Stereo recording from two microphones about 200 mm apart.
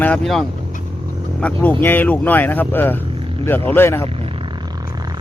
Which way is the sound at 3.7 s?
10° left (ahead or behind).